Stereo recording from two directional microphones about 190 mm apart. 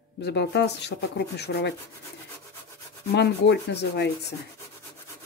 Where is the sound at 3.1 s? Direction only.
65° left (ahead or behind).